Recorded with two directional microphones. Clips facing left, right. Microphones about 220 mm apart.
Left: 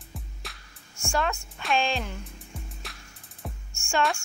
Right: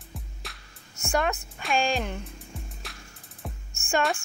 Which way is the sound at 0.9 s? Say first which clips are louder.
Right 2 dB; 20° right (ahead or behind).